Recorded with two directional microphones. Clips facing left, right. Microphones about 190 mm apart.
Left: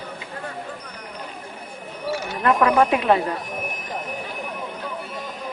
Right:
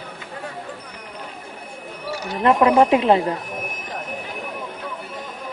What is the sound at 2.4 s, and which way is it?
Speech, 25° right (ahead or behind).